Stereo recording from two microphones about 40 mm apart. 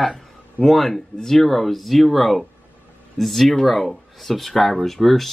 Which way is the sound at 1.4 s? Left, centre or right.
Centre.